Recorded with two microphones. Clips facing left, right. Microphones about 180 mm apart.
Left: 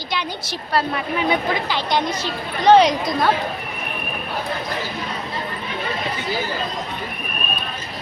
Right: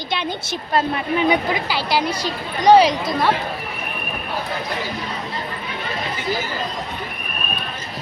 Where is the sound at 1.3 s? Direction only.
10° right (ahead or behind).